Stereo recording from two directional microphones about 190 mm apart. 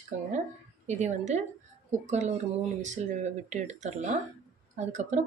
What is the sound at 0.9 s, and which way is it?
Speech, 40° right (ahead or behind).